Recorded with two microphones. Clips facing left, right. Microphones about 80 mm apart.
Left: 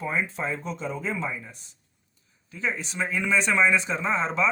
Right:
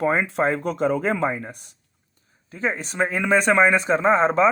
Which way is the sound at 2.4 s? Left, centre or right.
Right.